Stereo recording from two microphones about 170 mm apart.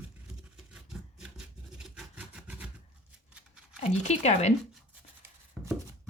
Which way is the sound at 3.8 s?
40° left (ahead or behind).